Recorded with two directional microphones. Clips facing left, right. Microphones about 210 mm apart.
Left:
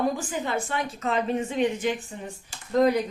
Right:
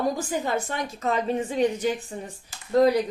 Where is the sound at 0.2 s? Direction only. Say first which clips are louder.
Right 2 dB; 40° right (ahead or behind).